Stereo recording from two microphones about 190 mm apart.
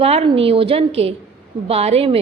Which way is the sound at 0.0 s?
30° right (ahead or behind).